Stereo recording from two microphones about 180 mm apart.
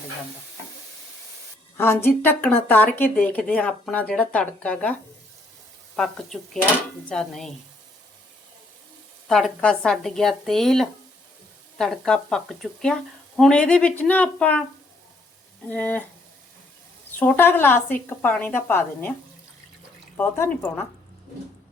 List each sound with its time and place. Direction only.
1.7 s speech: 15° left (ahead or behind)
6.0 s speech: centre (ahead or behind)
9.2 s speech: centre (ahead or behind)
15.7 s speech: 10° left (ahead or behind)
17.2 s speech: 10° left (ahead or behind)
20.1 s speech: 10° left (ahead or behind)